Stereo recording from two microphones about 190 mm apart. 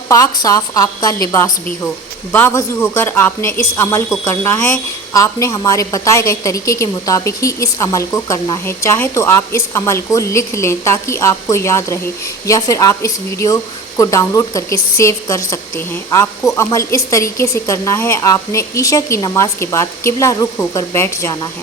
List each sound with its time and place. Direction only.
0.1 s a woman's voice: 15° left (ahead or behind)